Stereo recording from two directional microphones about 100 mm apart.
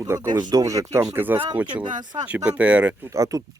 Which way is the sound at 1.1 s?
20° right (ahead or behind).